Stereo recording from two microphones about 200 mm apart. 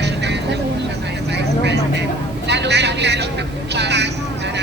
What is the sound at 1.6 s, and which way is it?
Vehicle, 60° right (ahead or behind).